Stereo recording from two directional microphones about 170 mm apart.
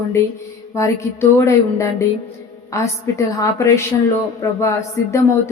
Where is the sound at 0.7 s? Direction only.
15° left (ahead or behind).